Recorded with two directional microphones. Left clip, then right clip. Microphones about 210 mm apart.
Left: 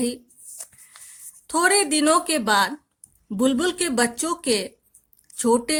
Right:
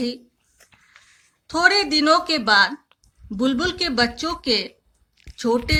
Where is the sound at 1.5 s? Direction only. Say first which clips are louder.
Right 2 dB; 50° left (ahead or behind).